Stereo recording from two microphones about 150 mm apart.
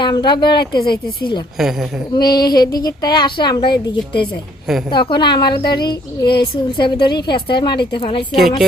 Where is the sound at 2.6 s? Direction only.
25° left (ahead or behind).